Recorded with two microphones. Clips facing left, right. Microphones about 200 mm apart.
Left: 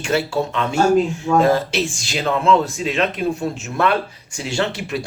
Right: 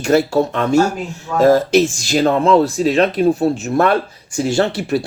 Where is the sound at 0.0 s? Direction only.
40° right (ahead or behind).